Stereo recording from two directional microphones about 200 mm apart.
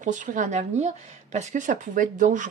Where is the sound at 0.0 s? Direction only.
40° right (ahead or behind).